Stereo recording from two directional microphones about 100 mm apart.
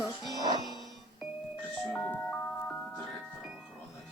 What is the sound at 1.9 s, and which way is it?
Speech, 15° left (ahead or behind).